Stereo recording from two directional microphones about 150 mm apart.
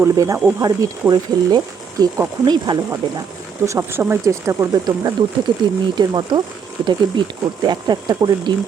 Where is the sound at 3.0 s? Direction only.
35° right (ahead or behind).